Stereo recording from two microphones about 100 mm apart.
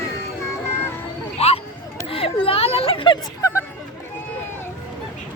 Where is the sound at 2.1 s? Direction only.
70° left (ahead or behind).